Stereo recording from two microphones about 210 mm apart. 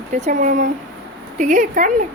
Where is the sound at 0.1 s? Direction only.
35° right (ahead or behind).